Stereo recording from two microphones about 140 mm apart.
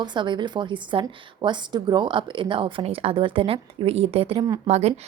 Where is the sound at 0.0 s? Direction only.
35° right (ahead or behind).